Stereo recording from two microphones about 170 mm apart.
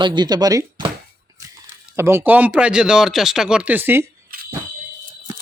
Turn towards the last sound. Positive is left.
turn(degrees=-10)  # may be behind; listen again after turning